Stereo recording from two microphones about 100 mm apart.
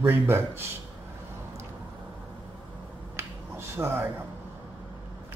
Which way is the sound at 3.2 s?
25° right (ahead or behind).